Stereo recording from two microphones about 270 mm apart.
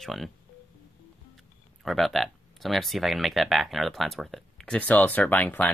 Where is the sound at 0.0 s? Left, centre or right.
Centre.